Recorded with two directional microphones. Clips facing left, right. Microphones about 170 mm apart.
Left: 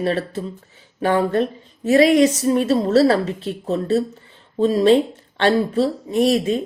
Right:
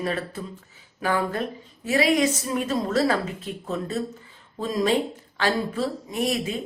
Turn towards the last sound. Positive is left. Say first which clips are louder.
# left 9 dB
turn(degrees=35)  # may be behind; listen again after turning